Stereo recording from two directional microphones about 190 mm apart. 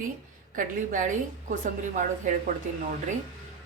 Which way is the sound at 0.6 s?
40° right (ahead or behind).